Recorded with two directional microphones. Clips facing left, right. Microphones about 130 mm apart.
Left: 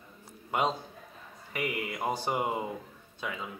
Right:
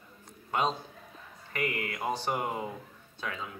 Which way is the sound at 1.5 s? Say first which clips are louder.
Even; 10° left (ahead or behind).